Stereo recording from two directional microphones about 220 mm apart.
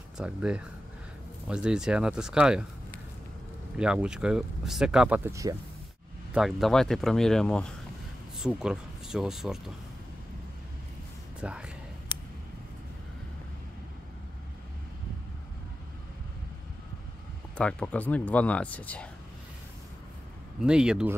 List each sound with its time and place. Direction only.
0.2 s speech: 5° right (ahead or behind)
3.7 s speech: 5° right (ahead or behind)
6.3 s speech: centre (ahead or behind)
11.4 s speech: 5° right (ahead or behind)
17.6 s speech: 5° left (ahead or behind)
20.6 s speech: 5° right (ahead or behind)